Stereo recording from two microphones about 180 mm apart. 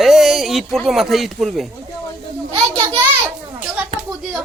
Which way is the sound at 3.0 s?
10° right (ahead or behind).